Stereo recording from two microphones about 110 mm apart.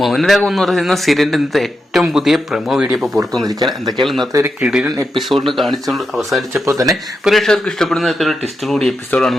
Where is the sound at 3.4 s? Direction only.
40° right (ahead or behind).